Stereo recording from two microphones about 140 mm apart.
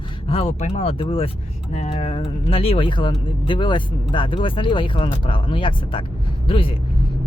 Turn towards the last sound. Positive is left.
turn(degrees=40)  # may be behind; listen again after turning